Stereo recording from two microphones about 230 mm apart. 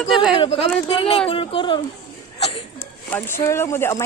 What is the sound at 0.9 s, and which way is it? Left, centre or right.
Speech, left.